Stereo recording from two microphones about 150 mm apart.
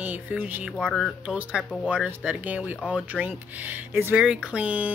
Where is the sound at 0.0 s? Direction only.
10° right (ahead or behind).